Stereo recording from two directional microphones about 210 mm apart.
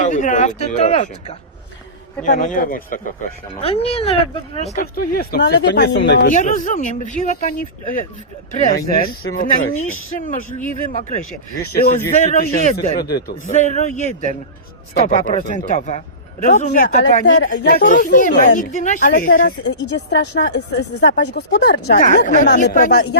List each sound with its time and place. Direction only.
0.0 s speech: 35° left (ahead or behind)
3.5 s speech: 30° left (ahead or behind); by 6.1 s 55° left (ahead or behind)
6.3 s speech: 35° left (ahead or behind)
9.0 s speech: 40° left (ahead or behind)
9.7 s speech: 75° left (ahead or behind)
10.2 s speech: 35° left (ahead or behind)
13.0 s a woman's voice: 45° left (ahead or behind)
13.5 s a woman's voice: 35° left (ahead or behind)